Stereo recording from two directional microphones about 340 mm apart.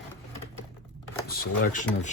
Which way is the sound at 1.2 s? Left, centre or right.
Left.